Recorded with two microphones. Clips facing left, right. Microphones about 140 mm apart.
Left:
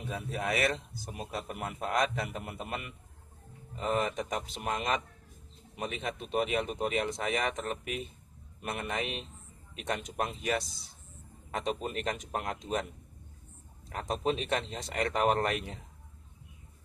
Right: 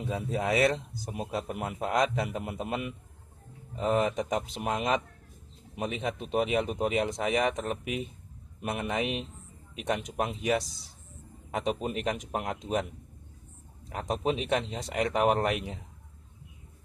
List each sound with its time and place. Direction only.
0.1 s a man's voice: 20° right (ahead or behind)
13.8 s speech: 15° right (ahead or behind)